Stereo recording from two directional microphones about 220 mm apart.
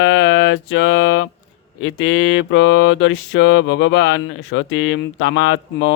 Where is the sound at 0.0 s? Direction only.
60° left (ahead or behind).